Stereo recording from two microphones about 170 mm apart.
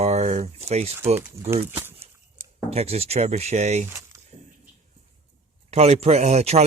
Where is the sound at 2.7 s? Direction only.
35° right (ahead or behind).